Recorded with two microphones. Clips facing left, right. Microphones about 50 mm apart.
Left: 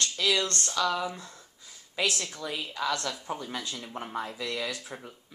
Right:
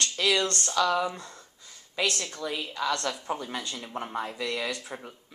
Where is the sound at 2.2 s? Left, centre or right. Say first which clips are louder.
Right 2 dB; centre.